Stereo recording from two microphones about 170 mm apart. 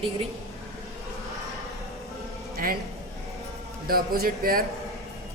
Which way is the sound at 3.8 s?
60° right (ahead or behind).